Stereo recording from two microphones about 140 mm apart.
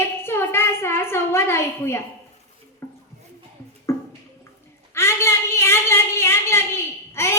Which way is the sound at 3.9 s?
20° left (ahead or behind).